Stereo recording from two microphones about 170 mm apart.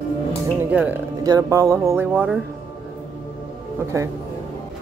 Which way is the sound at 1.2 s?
20° right (ahead or behind).